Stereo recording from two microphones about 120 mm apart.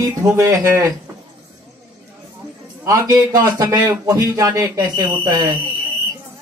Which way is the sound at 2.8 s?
30° right (ahead or behind).